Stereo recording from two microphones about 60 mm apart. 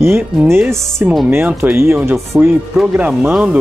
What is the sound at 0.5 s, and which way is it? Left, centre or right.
Speech, right.